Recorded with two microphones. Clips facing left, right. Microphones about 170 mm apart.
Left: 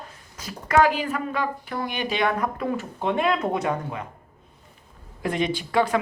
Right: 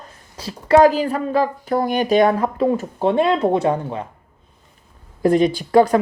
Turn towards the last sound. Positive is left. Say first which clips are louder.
# right 8 dB
turn(degrees=-40)  # may be behind; listen again after turning